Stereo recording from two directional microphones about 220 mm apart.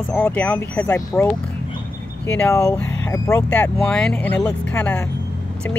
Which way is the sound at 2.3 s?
15° left (ahead or behind).